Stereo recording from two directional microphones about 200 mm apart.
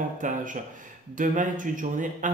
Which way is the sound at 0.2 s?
40° right (ahead or behind).